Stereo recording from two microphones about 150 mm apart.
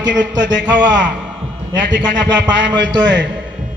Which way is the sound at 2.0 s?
30° right (ahead or behind).